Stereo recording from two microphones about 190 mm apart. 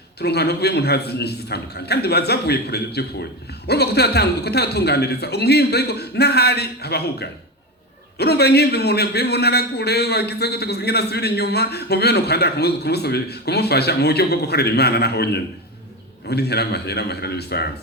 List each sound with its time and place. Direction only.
0.2 s a man's voice: 60° left (ahead or behind)